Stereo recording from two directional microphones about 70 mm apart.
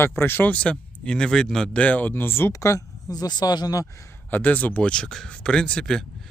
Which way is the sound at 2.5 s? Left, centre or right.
Left.